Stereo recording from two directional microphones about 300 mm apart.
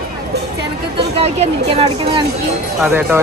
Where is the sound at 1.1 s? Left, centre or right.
Right.